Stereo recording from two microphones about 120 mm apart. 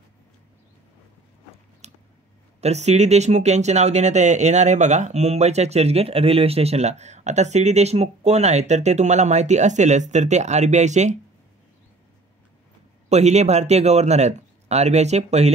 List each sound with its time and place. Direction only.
1.8 s a sound: 70° right (ahead or behind)
2.6 s speech: 65° right (ahead or behind)
13.1 s speech: 70° right (ahead or behind)